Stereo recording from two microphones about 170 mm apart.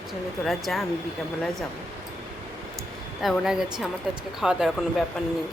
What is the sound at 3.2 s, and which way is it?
Speech, centre (ahead or behind).